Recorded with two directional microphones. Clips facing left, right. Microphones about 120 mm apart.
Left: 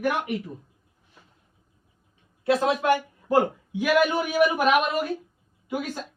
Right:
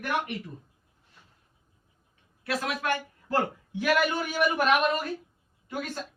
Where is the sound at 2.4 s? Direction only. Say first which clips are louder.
Left 8 dB; 25° left (ahead or behind).